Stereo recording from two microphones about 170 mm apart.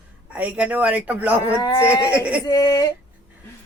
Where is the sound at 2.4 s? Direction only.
25° left (ahead or behind).